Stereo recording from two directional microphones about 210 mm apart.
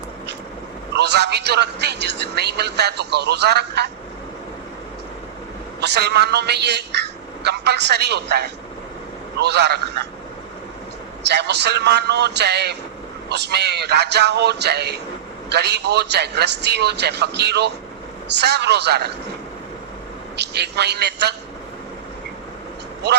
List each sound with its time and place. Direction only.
0.9 s a man's voice: 55° right (ahead or behind)
5.8 s a man's voice: 55° right (ahead or behind)
11.2 s a man's voice: 55° right (ahead or behind)
20.3 s a man's voice: 55° right (ahead or behind)